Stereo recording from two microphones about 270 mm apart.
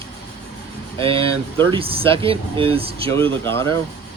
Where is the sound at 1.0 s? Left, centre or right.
Centre.